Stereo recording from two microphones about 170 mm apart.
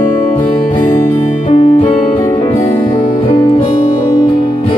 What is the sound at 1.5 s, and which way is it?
Music, 35° left (ahead or behind).